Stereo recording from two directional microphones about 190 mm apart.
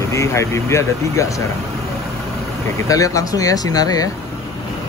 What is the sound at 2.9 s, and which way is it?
Speech, 20° left (ahead or behind).